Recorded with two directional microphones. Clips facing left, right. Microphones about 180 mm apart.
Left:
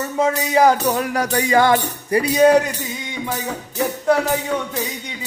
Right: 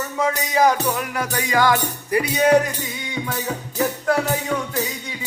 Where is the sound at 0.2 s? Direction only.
30° left (ahead or behind).